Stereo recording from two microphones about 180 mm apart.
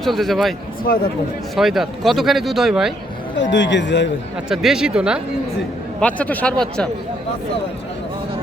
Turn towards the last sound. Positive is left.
turn(degrees=5)  # may be behind; listen again after turning